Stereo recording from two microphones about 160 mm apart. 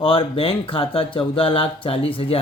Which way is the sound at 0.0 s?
35° left (ahead or behind).